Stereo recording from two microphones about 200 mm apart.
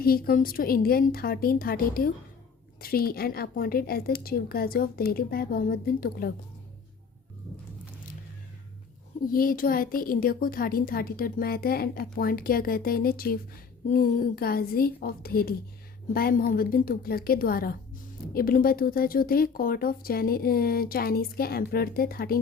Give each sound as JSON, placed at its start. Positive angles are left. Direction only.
{"t": 0.0, "sound": "speech", "side_deg": 50}
{"t": 9.2, "sound": "speech", "side_deg": 45}